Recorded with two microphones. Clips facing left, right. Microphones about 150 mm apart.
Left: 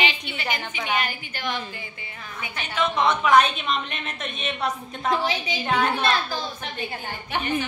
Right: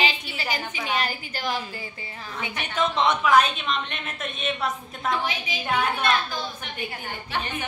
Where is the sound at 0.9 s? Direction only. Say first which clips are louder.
Even; 35° right (ahead or behind).